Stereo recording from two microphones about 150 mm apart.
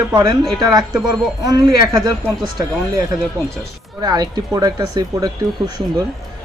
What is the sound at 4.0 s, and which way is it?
Speech, 25° right (ahead or behind).